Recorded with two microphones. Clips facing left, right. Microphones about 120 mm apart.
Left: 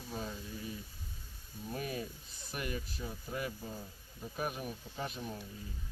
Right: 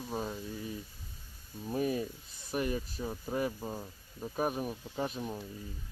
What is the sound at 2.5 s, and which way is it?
Speech, 35° right (ahead or behind).